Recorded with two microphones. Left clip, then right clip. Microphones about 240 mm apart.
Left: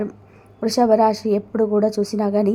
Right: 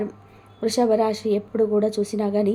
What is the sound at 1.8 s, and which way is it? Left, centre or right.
Speech, centre.